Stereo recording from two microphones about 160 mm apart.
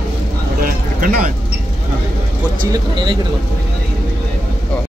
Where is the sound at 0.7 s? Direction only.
65° right (ahead or behind).